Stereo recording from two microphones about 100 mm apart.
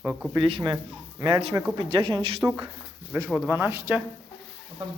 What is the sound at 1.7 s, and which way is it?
Speech, 60° right (ahead or behind).